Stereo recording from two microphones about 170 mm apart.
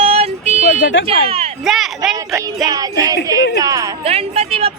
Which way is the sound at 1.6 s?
Centre (ahead or behind).